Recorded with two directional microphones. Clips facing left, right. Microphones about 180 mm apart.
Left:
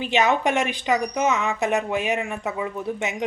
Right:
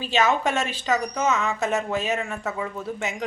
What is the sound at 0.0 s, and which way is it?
A woman's voice, 20° left (ahead or behind).